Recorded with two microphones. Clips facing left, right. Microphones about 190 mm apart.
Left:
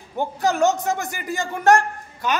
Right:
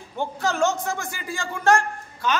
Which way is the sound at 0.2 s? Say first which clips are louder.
Left 3 dB; 15° left (ahead or behind).